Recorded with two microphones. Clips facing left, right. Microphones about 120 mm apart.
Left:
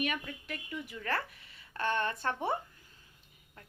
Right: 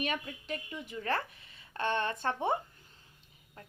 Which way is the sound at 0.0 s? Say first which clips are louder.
Even; 30° right (ahead or behind).